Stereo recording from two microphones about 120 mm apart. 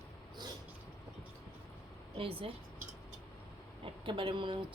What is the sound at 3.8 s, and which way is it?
Speech, 45° right (ahead or behind).